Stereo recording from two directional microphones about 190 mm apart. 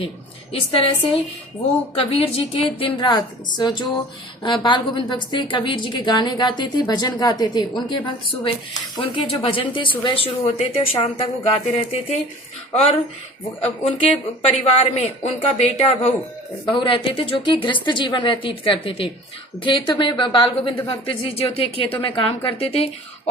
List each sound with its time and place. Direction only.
0.7 s a woman's voice: 30° left (ahead or behind)